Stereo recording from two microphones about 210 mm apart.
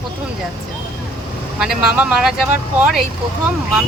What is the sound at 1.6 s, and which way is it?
Speech, 5° right (ahead or behind).